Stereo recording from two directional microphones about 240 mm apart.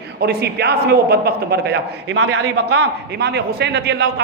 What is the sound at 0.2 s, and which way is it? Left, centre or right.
A man's voice, right.